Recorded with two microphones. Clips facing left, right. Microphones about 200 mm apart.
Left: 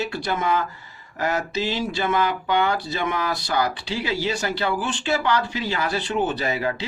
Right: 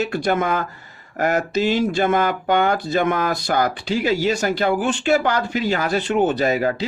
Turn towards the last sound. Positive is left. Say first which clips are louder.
# right 6 dB
turn(degrees=-40)  # may be behind; listen again after turning